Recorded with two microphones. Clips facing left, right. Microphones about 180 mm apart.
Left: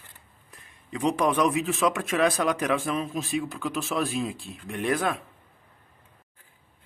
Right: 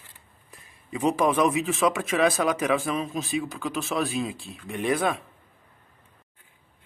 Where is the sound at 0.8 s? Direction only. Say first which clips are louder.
Right 1 dB; 5° right (ahead or behind).